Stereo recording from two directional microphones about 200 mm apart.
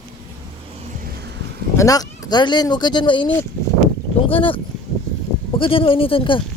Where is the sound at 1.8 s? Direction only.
20° left (ahead or behind).